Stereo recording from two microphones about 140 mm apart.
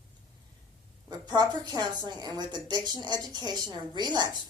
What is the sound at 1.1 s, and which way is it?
A woman's voice, 30° right (ahead or behind).